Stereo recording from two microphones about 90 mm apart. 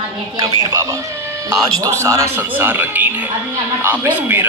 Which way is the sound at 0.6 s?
35° right (ahead or behind).